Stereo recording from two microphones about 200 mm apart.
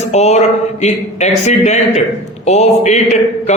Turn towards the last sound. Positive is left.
turn(degrees=35)  # may be behind; listen again after turning